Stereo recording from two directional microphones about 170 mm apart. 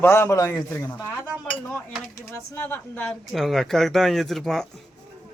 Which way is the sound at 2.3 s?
15° left (ahead or behind).